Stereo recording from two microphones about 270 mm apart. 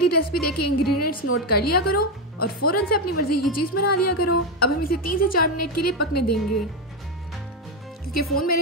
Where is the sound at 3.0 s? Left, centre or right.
Left.